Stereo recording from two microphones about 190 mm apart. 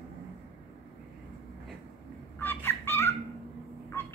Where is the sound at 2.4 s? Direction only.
10° left (ahead or behind).